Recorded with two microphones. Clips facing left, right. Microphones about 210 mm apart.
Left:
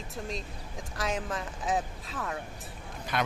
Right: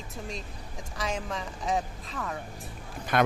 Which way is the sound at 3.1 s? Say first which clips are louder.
Right 7 dB; 50° right (ahead or behind).